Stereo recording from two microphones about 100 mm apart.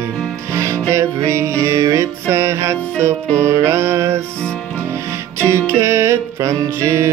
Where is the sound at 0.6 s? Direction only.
30° right (ahead or behind).